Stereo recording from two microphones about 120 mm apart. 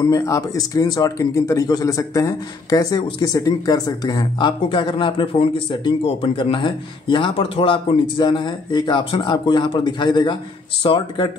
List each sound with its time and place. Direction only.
0.0 s speech: 25° left (ahead or behind); by 11.2 s 45° left (ahead or behind)